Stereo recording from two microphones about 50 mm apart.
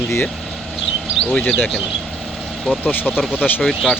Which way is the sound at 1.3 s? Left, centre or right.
Left.